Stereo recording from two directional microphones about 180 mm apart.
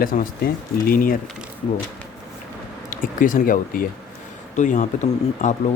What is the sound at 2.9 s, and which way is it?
Speech, 50° left (ahead or behind).